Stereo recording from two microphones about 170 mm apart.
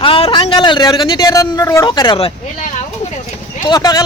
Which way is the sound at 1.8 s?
25° left (ahead or behind).